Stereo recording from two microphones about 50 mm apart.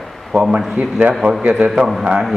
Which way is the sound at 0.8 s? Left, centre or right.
Right.